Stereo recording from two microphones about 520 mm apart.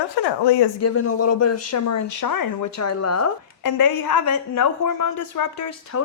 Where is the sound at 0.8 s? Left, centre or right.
Left.